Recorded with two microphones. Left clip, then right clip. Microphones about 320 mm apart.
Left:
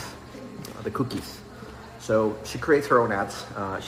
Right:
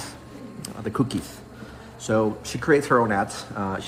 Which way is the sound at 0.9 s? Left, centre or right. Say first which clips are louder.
Right 3 dB; right.